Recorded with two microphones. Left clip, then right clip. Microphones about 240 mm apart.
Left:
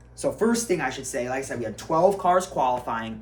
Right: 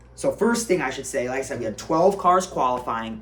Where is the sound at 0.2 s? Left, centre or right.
Centre.